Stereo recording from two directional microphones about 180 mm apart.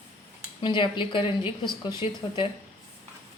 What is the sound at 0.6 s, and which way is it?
A woman's voice, 25° left (ahead or behind).